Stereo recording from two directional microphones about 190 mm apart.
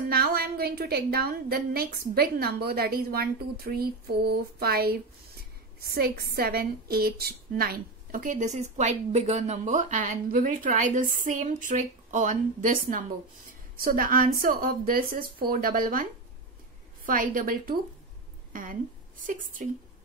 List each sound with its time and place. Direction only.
0.1 s a woman's voice: 55° right (ahead or behind)